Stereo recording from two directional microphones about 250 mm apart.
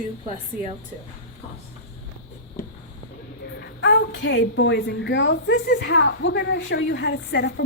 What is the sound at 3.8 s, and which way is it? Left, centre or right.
A woman's voice, left.